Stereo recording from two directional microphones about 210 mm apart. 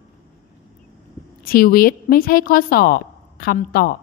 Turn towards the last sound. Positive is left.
turn(degrees=40)  # may be behind; listen again after turning